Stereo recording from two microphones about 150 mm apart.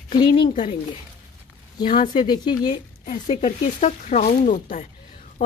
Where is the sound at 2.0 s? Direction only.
30° left (ahead or behind).